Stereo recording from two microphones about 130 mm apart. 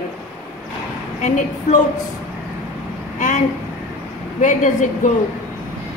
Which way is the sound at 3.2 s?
75° left (ahead or behind).